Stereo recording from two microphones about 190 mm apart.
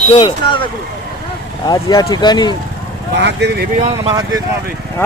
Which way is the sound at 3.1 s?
65° right (ahead or behind).